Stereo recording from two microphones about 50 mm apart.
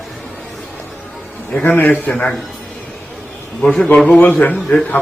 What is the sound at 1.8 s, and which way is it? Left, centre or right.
Speech, left.